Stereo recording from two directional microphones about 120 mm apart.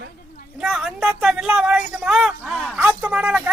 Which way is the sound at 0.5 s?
Centre (ahead or behind).